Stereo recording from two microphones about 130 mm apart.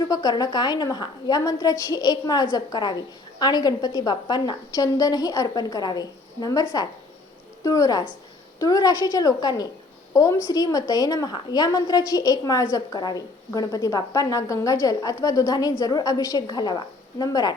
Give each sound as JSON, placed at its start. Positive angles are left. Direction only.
{"t": 0.1, "sound": "a woman's voice", "side_deg": 30}